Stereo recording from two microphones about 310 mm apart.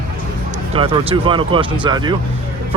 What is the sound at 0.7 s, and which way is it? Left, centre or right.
Speech, centre.